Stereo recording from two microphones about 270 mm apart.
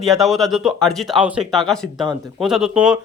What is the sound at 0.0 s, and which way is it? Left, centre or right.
A man's voice, centre.